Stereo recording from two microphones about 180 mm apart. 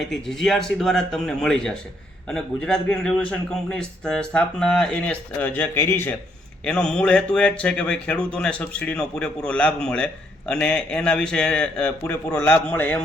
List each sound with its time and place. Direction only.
0.0 s speech: centre (ahead or behind)